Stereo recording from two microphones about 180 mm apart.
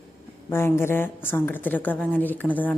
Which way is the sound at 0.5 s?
15° left (ahead or behind).